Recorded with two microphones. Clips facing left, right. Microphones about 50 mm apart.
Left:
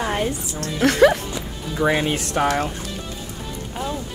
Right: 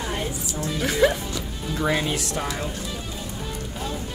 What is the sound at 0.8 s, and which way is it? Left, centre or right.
Speech, left.